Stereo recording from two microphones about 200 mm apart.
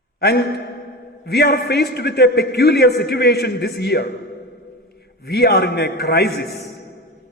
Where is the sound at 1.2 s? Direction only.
55° left (ahead or behind).